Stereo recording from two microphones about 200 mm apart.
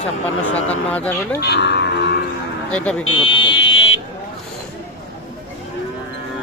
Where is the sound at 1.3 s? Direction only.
55° left (ahead or behind).